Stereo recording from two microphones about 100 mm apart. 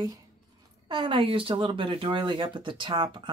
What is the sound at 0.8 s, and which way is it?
Speech, 55° right (ahead or behind).